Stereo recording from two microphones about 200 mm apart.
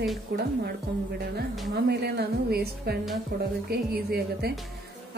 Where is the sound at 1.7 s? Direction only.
55° right (ahead or behind).